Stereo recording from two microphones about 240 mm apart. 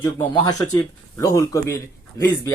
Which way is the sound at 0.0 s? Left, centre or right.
Centre.